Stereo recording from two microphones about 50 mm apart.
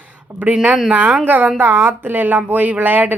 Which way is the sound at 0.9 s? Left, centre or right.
Right.